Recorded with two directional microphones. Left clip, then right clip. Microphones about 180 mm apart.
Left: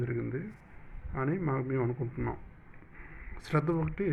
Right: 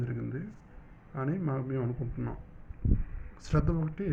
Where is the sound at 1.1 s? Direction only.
15° left (ahead or behind).